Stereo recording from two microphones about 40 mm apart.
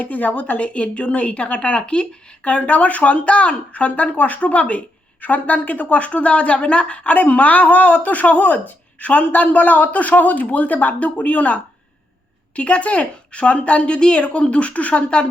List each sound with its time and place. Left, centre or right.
0.0 s speech: left